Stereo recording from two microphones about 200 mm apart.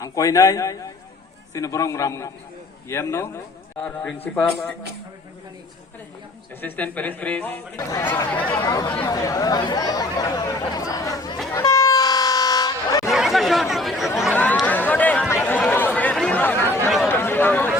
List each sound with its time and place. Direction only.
0.0 s speech: 15° left (ahead or behind)
6.6 s speech: 10° left (ahead or behind)
8.6 s speech: 20° left (ahead or behind)
11.5 s air horn: 15° left (ahead or behind)
13.1 s speech: centre (ahead or behind)
15.4 s chatter: 10° left (ahead or behind)
17.1 s a sound: 10° left (ahead or behind)